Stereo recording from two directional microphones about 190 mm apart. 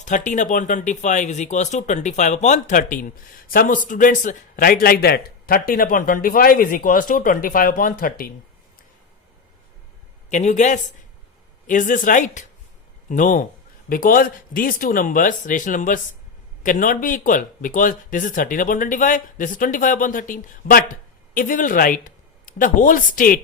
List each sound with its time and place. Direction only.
0.0 s speech: 40° left (ahead or behind)
10.2 s speech: 40° left (ahead or behind)